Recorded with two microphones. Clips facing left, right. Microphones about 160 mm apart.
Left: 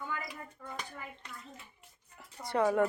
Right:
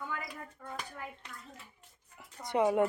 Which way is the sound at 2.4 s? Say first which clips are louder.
Right 1 dB; 20° right (ahead or behind).